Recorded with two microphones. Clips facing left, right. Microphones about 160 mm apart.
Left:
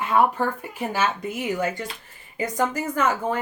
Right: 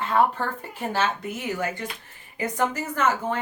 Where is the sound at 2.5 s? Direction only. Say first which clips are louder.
Left 2 dB; 10° left (ahead or behind).